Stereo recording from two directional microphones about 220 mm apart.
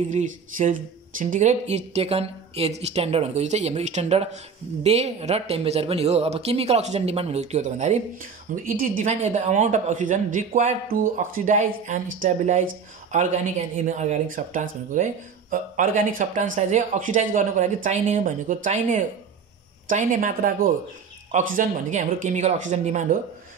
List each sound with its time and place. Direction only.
0.1 s speech: 35° right (ahead or behind)